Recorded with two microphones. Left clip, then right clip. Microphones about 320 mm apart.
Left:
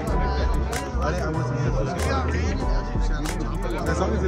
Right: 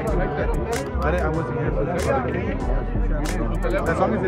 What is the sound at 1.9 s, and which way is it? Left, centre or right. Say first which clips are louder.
Music: right 4 dB; centre.